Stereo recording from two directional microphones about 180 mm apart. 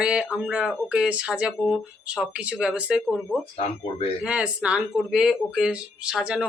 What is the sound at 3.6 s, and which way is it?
Speech, 35° left (ahead or behind).